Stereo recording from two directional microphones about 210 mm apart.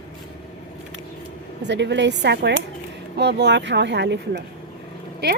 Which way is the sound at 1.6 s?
55° right (ahead or behind).